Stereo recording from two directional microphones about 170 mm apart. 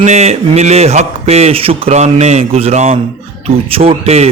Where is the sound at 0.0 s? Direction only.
40° right (ahead or behind).